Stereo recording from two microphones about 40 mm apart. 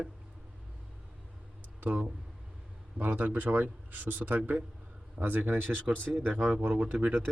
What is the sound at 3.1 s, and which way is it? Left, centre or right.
Speech, right.